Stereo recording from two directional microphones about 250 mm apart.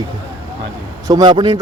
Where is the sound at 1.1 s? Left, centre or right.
Centre.